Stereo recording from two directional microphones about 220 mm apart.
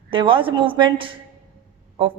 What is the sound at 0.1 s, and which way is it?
A woman's voice, 20° right (ahead or behind).